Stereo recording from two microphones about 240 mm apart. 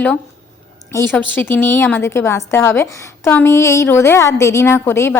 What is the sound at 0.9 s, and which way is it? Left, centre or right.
A woman's voice, centre.